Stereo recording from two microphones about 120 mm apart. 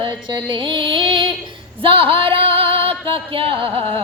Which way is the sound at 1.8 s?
50° right (ahead or behind).